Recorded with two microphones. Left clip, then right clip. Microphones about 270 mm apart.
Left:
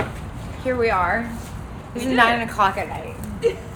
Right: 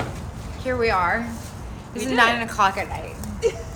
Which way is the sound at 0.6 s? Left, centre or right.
Centre.